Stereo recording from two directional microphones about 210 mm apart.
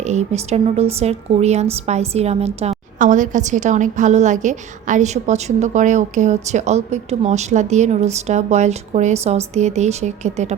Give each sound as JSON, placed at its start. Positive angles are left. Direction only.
{"t": 0.0, "sound": "a woman's voice", "side_deg": -35}